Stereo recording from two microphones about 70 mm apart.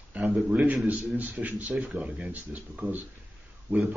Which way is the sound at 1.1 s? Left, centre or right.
Right.